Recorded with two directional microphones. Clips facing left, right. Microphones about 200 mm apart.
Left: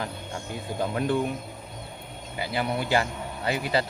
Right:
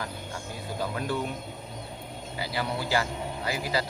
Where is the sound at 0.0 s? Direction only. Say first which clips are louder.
Left 2 dB; 20° left (ahead or behind).